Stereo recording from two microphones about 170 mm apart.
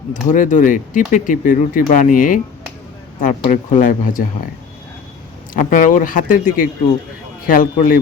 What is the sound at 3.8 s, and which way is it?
Speech, 50° left (ahead or behind).